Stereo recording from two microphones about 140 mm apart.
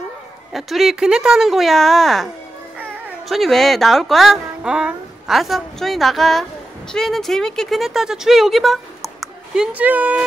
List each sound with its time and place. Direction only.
0.5 s speech: centre (ahead or behind)
3.3 s speech: centre (ahead or behind)